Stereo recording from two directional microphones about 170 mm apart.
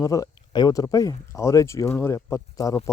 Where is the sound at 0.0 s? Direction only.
20° left (ahead or behind).